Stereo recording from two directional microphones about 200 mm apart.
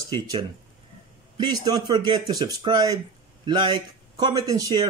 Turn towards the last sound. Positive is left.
turn(degrees=-20)  # may be behind; listen again after turning